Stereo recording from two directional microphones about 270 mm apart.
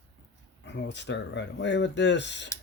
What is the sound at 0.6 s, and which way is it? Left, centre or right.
Speech, left.